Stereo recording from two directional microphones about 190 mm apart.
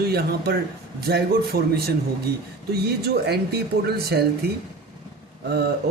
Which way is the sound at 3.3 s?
60° right (ahead or behind).